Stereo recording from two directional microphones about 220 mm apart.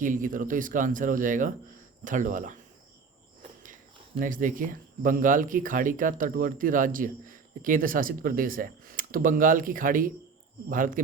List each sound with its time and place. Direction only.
0.0 s speech: 35° right (ahead or behind)
3.6 s speech: 35° right (ahead or behind)